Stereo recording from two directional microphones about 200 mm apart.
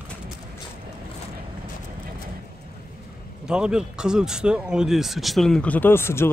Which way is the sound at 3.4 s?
5° right (ahead or behind).